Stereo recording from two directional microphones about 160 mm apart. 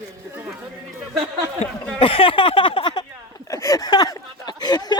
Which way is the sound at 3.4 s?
20° left (ahead or behind).